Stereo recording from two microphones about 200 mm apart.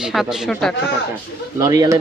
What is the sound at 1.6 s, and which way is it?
Speech, 15° right (ahead or behind).